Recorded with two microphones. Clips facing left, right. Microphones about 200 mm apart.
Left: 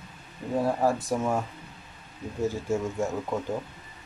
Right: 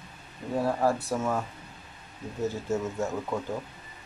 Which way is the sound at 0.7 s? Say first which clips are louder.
Even; 10° left (ahead or behind).